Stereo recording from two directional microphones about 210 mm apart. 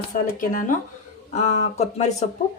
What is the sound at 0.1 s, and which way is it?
A woman's voice, 40° left (ahead or behind).